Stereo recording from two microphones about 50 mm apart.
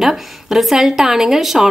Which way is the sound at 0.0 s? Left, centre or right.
Centre.